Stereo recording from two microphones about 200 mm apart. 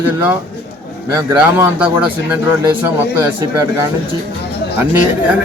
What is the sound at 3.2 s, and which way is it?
Speech, 15° right (ahead or behind).